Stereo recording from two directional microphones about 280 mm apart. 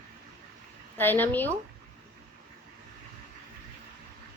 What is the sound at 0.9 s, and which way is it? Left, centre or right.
Speech, centre.